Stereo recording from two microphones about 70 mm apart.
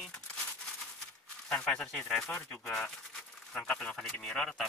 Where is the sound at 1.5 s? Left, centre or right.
Centre.